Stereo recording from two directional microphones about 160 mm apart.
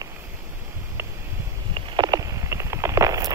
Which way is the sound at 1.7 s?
30° right (ahead or behind).